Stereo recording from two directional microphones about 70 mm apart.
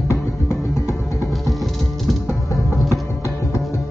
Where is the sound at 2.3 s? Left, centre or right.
Left.